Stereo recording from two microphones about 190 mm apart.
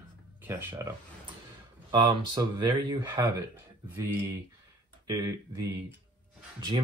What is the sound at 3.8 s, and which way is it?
Speech, 10° right (ahead or behind).